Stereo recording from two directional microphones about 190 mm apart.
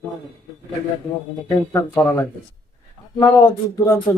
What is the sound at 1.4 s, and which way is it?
Speech, 15° left (ahead or behind).